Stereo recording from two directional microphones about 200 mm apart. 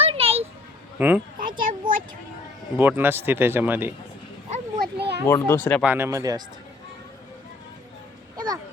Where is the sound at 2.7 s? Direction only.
10° right (ahead or behind).